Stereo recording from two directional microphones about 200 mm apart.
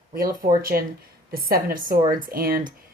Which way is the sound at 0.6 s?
45° right (ahead or behind).